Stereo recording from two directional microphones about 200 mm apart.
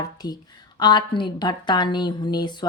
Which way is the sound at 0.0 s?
20° left (ahead or behind).